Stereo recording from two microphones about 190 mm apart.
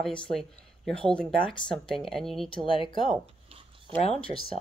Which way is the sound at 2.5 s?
25° left (ahead or behind).